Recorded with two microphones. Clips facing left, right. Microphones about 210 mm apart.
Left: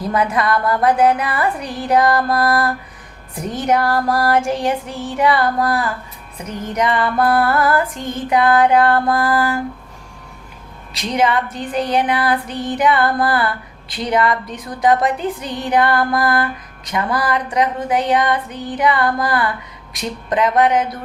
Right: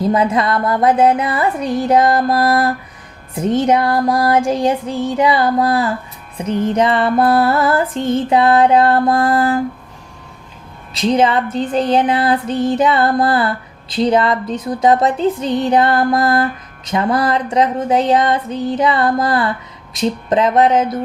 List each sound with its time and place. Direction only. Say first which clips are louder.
0.0 s music: right 4 dB; 25° right (ahead or behind)
11.0 s music: right 4 dB; 25° right (ahead or behind)